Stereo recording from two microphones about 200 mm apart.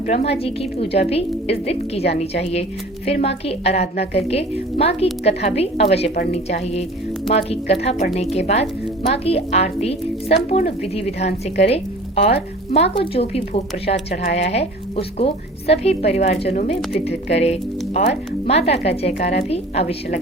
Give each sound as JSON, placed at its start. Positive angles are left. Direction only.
{"t": 0.1, "sound": "a woman's voice", "side_deg": 30}